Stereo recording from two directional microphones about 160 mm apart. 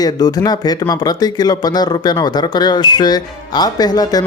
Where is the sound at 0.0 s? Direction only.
25° left (ahead or behind).